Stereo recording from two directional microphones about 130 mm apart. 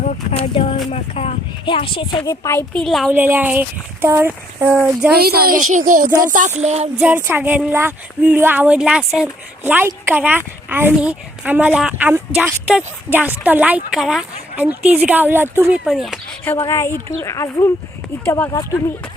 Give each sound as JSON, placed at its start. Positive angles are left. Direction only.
{"t": 0.0, "sound": "speech", "side_deg": 75}
{"t": 0.5, "sound": "speech", "side_deg": 45}
{"t": 1.6, "sound": "a woman's voice", "side_deg": 40}
{"t": 2.7, "sound": "speech", "side_deg": 0}
{"t": 3.1, "sound": "speech", "side_deg": -15}
{"t": 5.5, "sound": "a child's voice", "side_deg": -90}
{"t": 6.2, "sound": "speech", "side_deg": -80}
{"t": 7.0, "sound": "speech", "side_deg": -15}
{"t": 15.8, "sound": "speech", "side_deg": -5}
{"t": 16.6, "sound": "speech", "side_deg": 20}